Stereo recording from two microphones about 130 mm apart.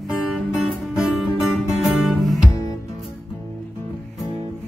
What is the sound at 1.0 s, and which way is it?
Music, 5° right (ahead or behind).